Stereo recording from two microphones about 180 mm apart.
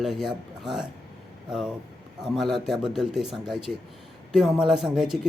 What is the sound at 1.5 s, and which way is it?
Speech, 5° right (ahead or behind).